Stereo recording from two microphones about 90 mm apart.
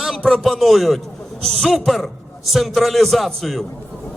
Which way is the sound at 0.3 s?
Centre (ahead or behind).